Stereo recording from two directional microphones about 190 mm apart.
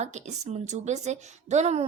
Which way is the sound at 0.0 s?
35° right (ahead or behind).